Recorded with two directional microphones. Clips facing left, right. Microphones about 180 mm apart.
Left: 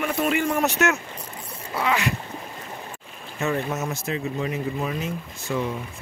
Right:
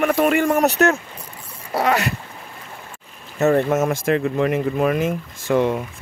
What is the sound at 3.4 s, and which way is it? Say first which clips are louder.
Speech: right 9 dB; 50° right (ahead or behind).